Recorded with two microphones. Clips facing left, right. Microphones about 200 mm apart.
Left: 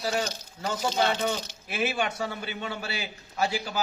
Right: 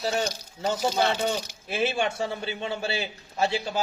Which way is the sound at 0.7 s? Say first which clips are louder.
Even; 10° right (ahead or behind).